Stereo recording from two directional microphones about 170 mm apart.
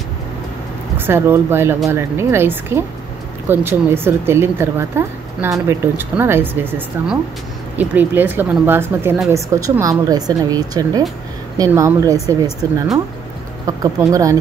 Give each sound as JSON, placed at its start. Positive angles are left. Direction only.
{"t": 0.9, "sound": "speech", "side_deg": -15}